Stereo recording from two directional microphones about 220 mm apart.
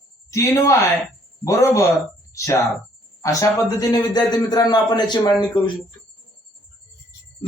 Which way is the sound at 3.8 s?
20° left (ahead or behind).